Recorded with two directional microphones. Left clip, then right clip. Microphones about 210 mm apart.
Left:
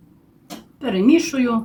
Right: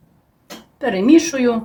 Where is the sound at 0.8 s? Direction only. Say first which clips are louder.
Right 3 dB; 35° right (ahead or behind).